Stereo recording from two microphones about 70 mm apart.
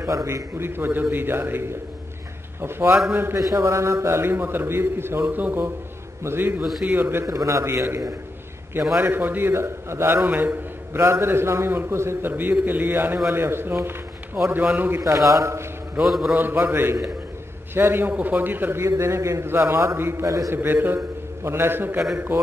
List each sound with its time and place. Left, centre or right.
0.0 s a man's voice: right
3.3 s a man's voice: right
7.2 s a man's voice: right
9.0 s a man's voice: right
15.0 s a man's voice: right
16.0 s a man's voice: centre
16.3 s a man's voice: right
18.9 s a man's voice: right
20.2 s a man's voice: right
20.5 s a man's voice: right